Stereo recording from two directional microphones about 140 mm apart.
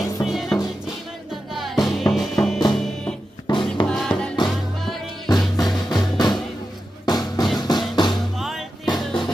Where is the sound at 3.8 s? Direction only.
5° left (ahead or behind).